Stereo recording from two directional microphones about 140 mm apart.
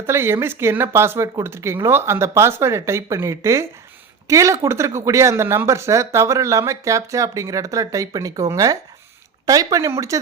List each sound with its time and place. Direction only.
0.0 s speech: 15° right (ahead or behind)